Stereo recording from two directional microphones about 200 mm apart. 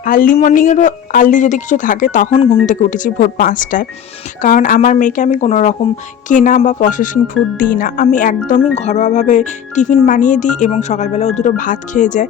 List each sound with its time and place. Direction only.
0.0 s speech: 45° left (ahead or behind)
2.3 s speech: 30° left (ahead or behind)
2.6 s speech: 40° left (ahead or behind)